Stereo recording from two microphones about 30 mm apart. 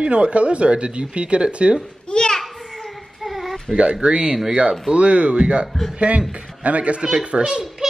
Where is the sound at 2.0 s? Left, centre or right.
Left.